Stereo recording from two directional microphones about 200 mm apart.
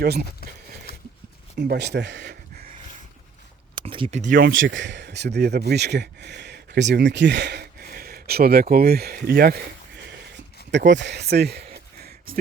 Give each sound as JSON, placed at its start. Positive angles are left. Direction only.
{"t": 0.0, "sound": "speech", "side_deg": -50}
{"t": 1.5, "sound": "speech", "side_deg": -55}
{"t": 3.8, "sound": "speech", "side_deg": -25}
{"t": 4.5, "sound": "speech", "side_deg": -70}